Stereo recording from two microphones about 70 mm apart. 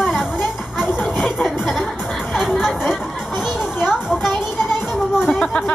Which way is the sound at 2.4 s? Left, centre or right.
Centre.